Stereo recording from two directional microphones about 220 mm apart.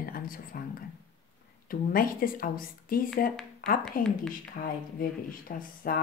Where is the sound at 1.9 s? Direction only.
40° left (ahead or behind).